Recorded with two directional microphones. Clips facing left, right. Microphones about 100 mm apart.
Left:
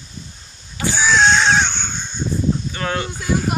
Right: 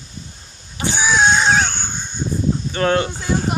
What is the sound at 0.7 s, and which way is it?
Crow, 20° right (ahead or behind).